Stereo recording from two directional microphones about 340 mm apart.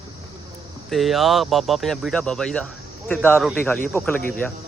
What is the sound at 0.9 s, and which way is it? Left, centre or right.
Speech, centre.